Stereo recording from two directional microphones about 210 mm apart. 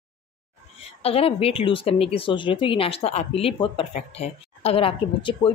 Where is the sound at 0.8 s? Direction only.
30° left (ahead or behind).